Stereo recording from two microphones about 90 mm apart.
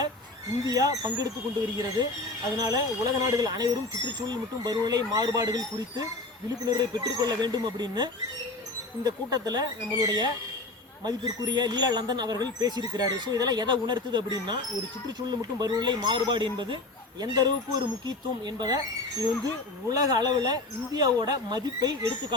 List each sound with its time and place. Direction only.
0.6 s speech: 45° right (ahead or behind)
6.7 s speech: 50° right (ahead or behind)
17.2 s speech: 50° right (ahead or behind)
19.9 s speech: 45° right (ahead or behind)